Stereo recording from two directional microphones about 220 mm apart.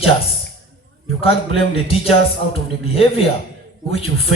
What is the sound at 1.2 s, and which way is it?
A man's voice, 25° left (ahead or behind).